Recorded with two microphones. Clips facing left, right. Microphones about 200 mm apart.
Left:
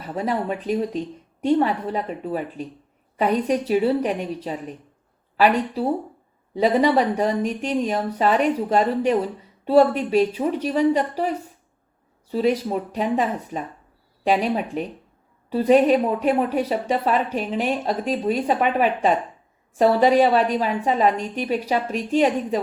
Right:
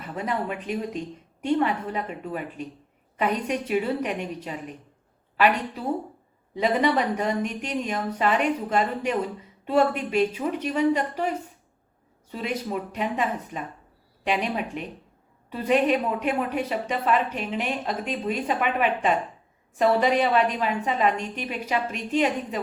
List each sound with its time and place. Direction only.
0.0 s a woman's voice: 35° left (ahead or behind)